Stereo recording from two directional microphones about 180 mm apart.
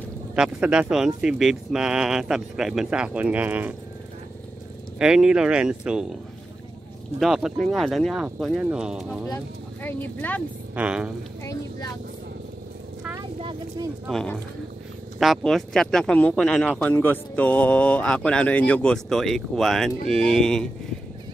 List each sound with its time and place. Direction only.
0.4 s speech: 5° right (ahead or behind)
4.9 s speech: 5° right (ahead or behind)
7.2 s speech: centre (ahead or behind)
9.3 s speech: 10° left (ahead or behind)
10.7 s speech: 5° right (ahead or behind)
13.4 s speech: 30° right (ahead or behind)
14.0 s speech: 5° left (ahead or behind)